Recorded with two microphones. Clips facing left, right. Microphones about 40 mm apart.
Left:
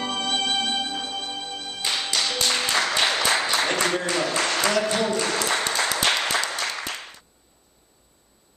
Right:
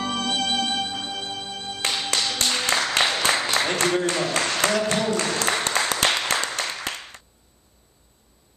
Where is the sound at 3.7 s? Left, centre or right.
Centre.